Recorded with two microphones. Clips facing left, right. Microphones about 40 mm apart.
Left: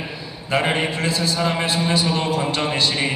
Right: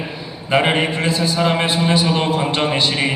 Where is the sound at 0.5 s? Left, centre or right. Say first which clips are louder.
Right 4 dB; right.